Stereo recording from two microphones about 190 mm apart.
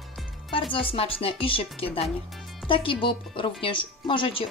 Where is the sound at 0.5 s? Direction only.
25° left (ahead or behind).